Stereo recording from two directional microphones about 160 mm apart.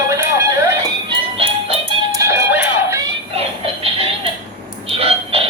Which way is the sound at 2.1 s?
15° right (ahead or behind).